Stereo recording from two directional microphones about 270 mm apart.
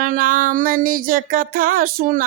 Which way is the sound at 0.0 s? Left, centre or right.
Right.